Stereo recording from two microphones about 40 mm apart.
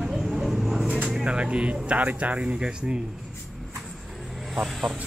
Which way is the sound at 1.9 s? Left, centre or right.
Right.